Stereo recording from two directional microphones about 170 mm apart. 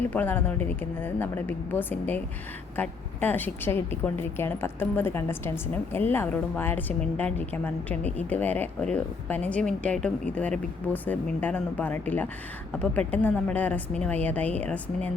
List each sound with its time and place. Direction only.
0.1 s a woman's voice: 10° left (ahead or behind)